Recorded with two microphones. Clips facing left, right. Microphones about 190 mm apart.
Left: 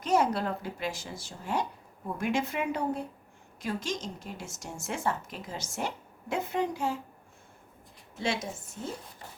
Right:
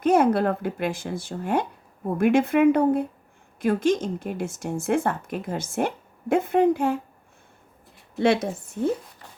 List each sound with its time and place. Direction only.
0.0 s speech: 55° right (ahead or behind)
8.2 s speech: 60° right (ahead or behind)